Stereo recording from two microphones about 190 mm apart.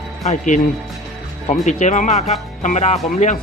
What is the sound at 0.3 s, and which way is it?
Speech, 40° left (ahead or behind).